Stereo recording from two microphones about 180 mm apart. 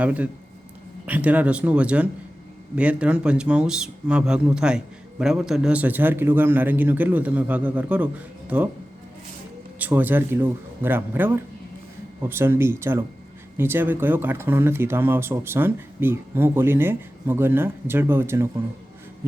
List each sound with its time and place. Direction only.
0.0 s speech: 10° right (ahead or behind)
9.7 s speech: 10° right (ahead or behind)